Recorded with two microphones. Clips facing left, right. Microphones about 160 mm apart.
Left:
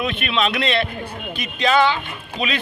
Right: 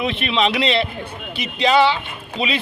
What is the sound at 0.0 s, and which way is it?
Speech, 25° right (ahead or behind).